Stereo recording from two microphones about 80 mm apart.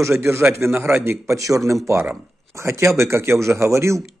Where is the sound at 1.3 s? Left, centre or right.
Right.